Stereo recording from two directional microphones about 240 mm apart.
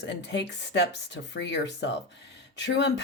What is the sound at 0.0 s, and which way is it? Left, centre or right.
Speech, left.